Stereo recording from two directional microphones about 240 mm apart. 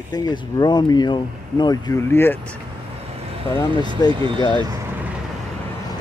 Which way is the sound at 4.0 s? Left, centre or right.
Centre.